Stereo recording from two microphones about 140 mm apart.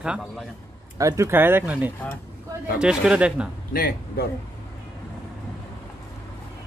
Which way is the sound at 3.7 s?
90° left.